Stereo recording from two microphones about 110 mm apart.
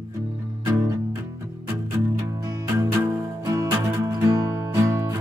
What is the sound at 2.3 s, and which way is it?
Music, 25° right (ahead or behind).